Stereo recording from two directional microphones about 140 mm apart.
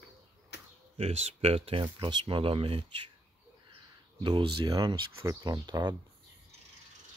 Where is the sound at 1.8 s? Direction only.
35° right (ahead or behind).